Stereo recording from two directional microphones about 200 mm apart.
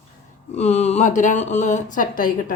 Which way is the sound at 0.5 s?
35° left (ahead or behind).